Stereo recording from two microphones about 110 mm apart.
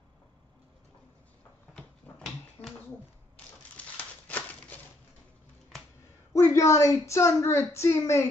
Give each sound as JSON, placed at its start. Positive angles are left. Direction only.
{"t": 1.8, "sound": "dog", "side_deg": 5}
{"t": 3.7, "sound": "a sound", "side_deg": 15}
{"t": 6.3, "sound": "a woman's voice", "side_deg": 25}